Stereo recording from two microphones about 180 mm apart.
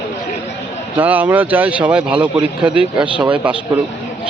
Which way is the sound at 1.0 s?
10° right (ahead or behind).